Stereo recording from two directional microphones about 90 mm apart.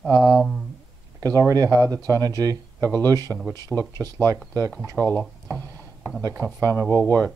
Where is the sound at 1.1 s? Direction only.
40° right (ahead or behind).